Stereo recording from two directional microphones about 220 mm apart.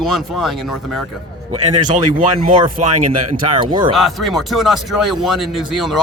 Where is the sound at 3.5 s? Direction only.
20° right (ahead or behind).